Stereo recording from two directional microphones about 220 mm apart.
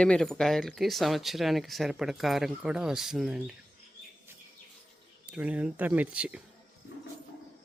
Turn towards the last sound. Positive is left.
turn(degrees=-5)  # may be behind; listen again after turning